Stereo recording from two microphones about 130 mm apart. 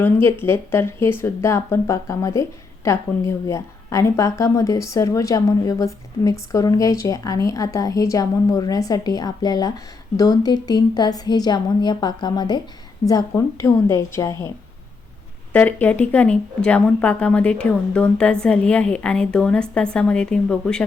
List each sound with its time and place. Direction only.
0.0 s a woman's voice: 15° left (ahead or behind)
15.5 s speech: 15° left (ahead or behind)